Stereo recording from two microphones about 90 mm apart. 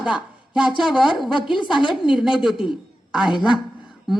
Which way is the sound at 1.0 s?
Centre (ahead or behind).